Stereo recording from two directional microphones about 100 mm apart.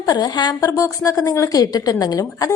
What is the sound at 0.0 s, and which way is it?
A woman's voice, 45° left (ahead or behind).